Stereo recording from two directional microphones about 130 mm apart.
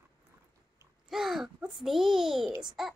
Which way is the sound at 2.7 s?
Centre (ahead or behind).